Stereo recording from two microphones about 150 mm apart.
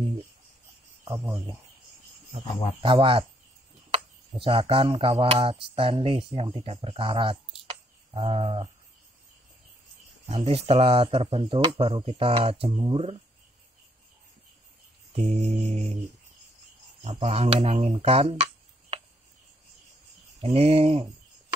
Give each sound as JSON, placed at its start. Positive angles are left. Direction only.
{"t": 1.0, "sound": "cricket", "side_deg": -15}
{"t": 2.8, "sound": "speech", "side_deg": -35}
{"t": 10.2, "sound": "speech", "side_deg": -45}
{"t": 15.1, "sound": "music", "side_deg": -45}
{"t": 17.0, "sound": "speech", "side_deg": -45}
{"t": 20.3, "sound": "music", "side_deg": -45}